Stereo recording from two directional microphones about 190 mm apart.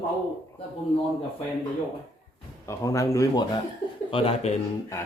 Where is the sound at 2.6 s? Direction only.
15° left (ahead or behind).